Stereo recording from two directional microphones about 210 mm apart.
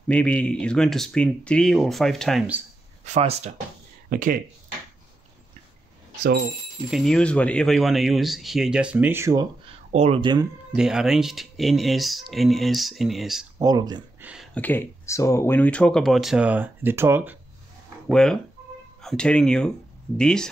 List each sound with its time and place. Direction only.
0.1 s speech: 5° left (ahead or behind)
3.1 s speech: 30° right (ahead or behind)
4.1 s speech: 40° right (ahead or behind)
6.9 s speech: centre (ahead or behind); by 9.8 s 15° right (ahead or behind)
9.9 s speech: 30° right (ahead or behind)
10.7 s speech: 5° right (ahead or behind)
13.6 s speech: 15° right (ahead or behind)
14.2 s speech: 5° right (ahead or behind)
18.0 s speech: 5° left (ahead or behind)